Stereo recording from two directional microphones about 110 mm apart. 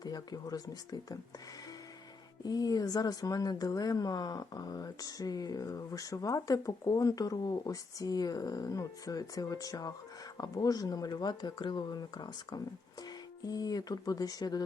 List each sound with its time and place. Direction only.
0.0 s speech: 35° left (ahead or behind)
2.4 s speech: 35° left (ahead or behind)